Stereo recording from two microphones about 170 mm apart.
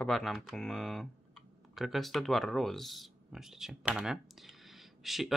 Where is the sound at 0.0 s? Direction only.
Centre (ahead or behind).